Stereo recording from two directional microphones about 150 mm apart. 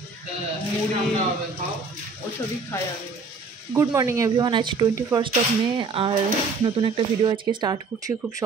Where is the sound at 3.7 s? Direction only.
20° right (ahead or behind).